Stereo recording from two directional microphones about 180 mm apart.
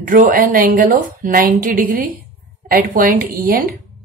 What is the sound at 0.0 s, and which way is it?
A woman's voice, 50° right (ahead or behind).